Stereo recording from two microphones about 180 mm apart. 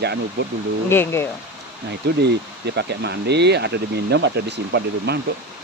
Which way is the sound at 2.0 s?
70° right (ahead or behind).